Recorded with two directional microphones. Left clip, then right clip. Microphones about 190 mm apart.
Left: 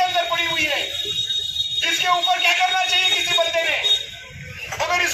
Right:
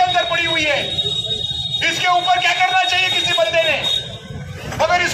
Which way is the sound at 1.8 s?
15° left (ahead or behind).